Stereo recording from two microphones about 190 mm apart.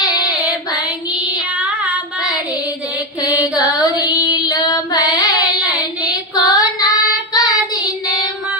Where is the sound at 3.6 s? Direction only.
20° left (ahead or behind).